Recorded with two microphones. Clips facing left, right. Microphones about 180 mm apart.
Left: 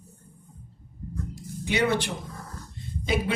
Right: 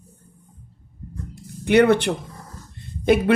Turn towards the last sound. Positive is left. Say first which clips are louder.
# right 10 dB
turn(degrees=-60)  # may be behind; listen again after turning